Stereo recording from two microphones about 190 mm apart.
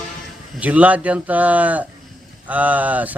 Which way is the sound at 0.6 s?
10° right (ahead or behind).